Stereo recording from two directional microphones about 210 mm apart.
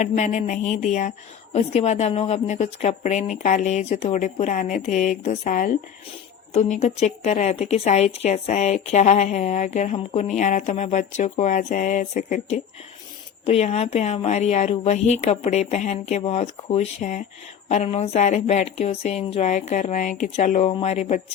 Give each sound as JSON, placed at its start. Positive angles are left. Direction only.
{"t": 0.0, "sound": "a woman's voice", "side_deg": 35}